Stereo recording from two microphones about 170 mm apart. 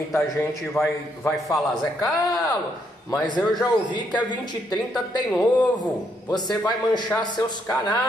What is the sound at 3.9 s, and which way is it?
Speech, 25° left (ahead or behind).